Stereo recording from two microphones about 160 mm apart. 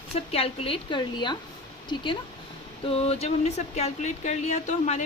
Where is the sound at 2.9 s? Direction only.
40° left (ahead or behind).